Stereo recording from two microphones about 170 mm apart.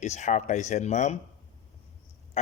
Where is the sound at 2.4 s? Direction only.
40° left (ahead or behind).